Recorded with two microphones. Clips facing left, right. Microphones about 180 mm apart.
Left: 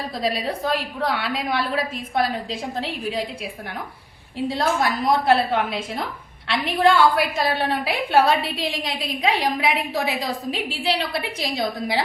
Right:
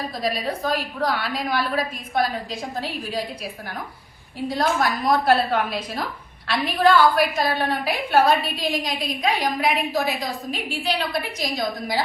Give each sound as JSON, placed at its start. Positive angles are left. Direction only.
{"t": 0.2, "sound": "a woman's voice", "side_deg": 25}
{"t": 4.4, "sound": "a woman's voice", "side_deg": 25}